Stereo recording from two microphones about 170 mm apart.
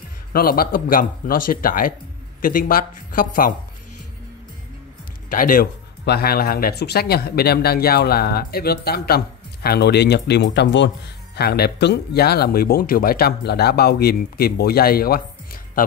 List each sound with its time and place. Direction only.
0.3 s speech: 60° left (ahead or behind)
5.3 s speech: 55° left (ahead or behind); by 10.9 s 85° left
11.3 s speech: 70° left (ahead or behind)